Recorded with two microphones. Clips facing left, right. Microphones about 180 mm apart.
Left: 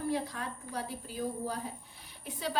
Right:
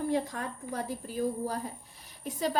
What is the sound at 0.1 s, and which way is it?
Speech, 50° right (ahead or behind).